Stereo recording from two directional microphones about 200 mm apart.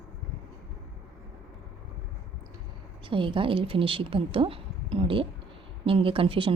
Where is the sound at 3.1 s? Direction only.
25° right (ahead or behind).